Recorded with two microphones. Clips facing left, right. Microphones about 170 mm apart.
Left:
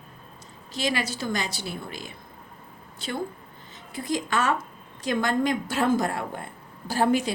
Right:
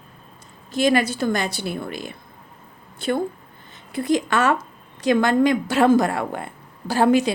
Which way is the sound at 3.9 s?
65° right (ahead or behind).